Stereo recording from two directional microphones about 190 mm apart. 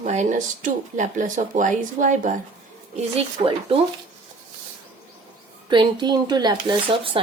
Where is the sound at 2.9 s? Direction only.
30° right (ahead or behind).